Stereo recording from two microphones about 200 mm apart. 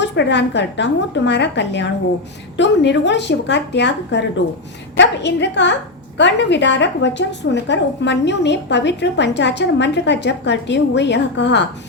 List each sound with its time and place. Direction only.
0.0 s a woman's voice: 60° left (ahead or behind)